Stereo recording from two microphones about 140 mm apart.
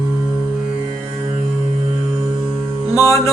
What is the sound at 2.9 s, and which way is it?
Music, 20° left (ahead or behind).